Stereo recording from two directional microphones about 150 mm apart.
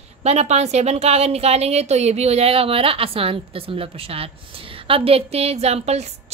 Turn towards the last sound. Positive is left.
turn(degrees=-45)  # may be behind; listen again after turning